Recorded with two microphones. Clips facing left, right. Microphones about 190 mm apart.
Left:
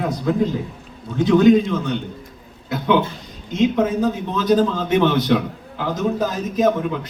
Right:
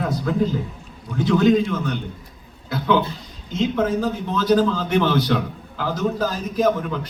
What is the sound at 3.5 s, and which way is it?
A man's voice, 20° left (ahead or behind).